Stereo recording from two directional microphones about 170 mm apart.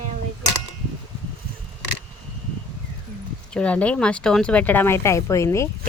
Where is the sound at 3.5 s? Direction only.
5° left (ahead or behind).